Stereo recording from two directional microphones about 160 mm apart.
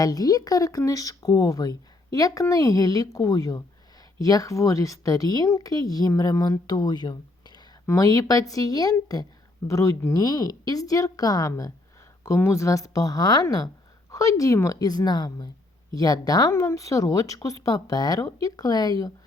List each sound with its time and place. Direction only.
0.0 s speech: 25° left (ahead or behind)